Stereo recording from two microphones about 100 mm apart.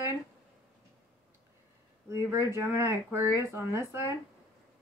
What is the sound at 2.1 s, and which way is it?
Speech, 25° right (ahead or behind).